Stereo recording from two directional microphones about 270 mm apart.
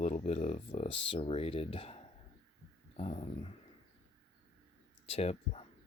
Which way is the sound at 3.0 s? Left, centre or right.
Left.